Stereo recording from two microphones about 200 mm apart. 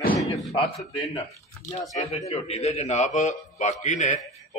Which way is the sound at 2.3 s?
30° left (ahead or behind).